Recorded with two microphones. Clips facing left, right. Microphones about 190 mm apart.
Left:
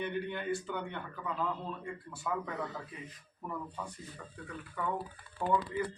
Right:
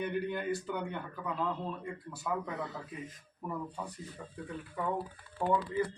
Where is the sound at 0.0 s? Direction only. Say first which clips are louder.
Right 2 dB; 5° right (ahead or behind).